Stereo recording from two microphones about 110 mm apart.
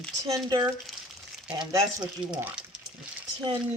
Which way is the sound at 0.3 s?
35° right (ahead or behind).